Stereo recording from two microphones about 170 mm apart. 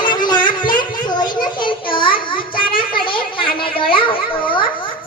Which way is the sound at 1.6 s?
30° left (ahead or behind).